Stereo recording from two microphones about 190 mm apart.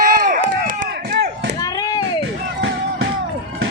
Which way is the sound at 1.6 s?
20° left (ahead or behind).